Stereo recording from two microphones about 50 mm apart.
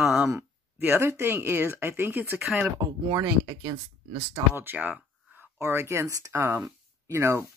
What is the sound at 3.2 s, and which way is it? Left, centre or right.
Speech, right.